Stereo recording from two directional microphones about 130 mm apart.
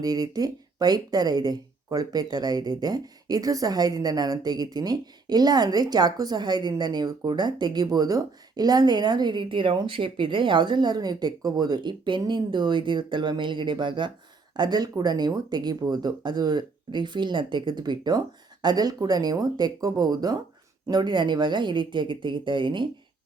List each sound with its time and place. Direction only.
0.0 s speech: 30° right (ahead or behind)